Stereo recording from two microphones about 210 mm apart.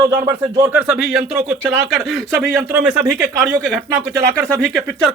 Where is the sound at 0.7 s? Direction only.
5° right (ahead or behind).